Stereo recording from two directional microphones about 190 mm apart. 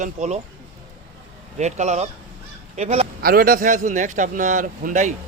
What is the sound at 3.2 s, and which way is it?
Speech, 50° right (ahead or behind).